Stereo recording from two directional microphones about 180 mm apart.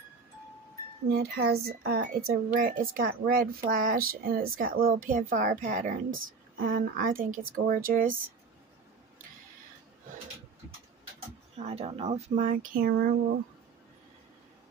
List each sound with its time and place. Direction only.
1.1 s a woman's voice: 60° right (ahead or behind)
11.5 s speech: 35° right (ahead or behind); by 13.1 s 55° right (ahead or behind)